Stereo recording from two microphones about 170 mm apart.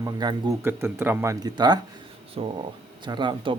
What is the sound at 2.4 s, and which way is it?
Speech, 35° right (ahead or behind).